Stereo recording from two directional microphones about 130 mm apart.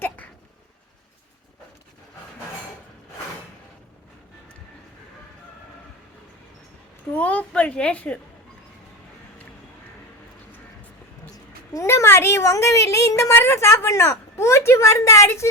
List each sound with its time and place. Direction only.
7.1 s a woman's voice: 10° left (ahead or behind)
11.7 s a woman's voice: 25° left (ahead or behind)